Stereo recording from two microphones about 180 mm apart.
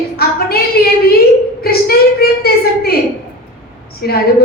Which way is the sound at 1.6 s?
60° left (ahead or behind).